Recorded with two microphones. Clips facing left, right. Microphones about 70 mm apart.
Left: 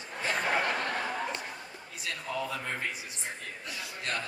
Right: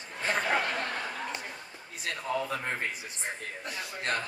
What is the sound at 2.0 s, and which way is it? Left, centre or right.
A man's voice, right.